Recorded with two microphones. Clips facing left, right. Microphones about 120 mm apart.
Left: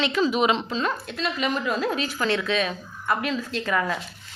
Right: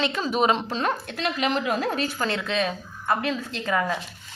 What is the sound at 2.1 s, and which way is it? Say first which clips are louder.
A woman's voice: left 2 dB; 30° right (ahead or behind).